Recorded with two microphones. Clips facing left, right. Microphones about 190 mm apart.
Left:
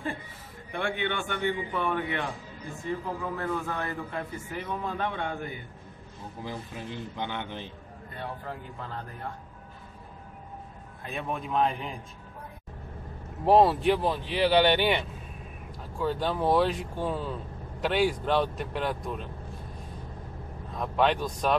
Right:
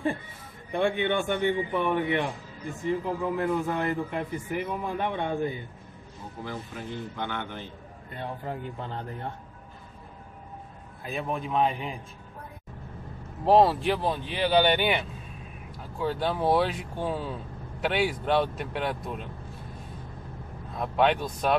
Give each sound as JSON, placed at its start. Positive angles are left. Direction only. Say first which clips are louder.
{"t": 0.7, "sound": "a man's voice", "louder": "right 5 dB", "side_deg": -20}
{"t": 6.4, "sound": "speech", "louder": "right 1 dB", "side_deg": 15}
{"t": 8.2, "sound": "a man's voice", "louder": "right 3 dB", "side_deg": -20}
{"t": 11.1, "sound": "speech", "louder": "right 2 dB", "side_deg": 0}
{"t": 13.5, "sound": "speech", "louder": "even", "side_deg": 0}
{"t": 20.7, "sound": "speech", "louder": "right 1 dB", "side_deg": -5}